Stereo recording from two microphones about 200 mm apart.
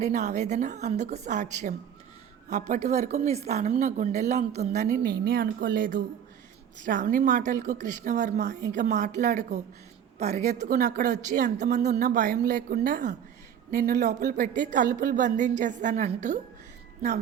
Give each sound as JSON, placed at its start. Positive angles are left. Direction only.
{"t": 0.0, "sound": "a woman's voice", "side_deg": -35}
{"t": 5.2, "sound": "a woman's voice", "side_deg": -50}